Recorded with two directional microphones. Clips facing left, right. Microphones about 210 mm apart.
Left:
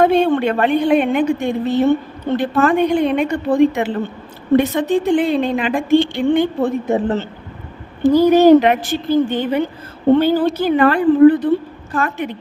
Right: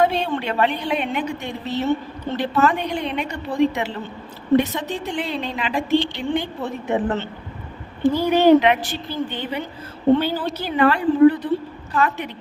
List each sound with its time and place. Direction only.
0.0 s a woman's voice: 50° left (ahead or behind)
8.1 s a woman's voice: 45° left (ahead or behind)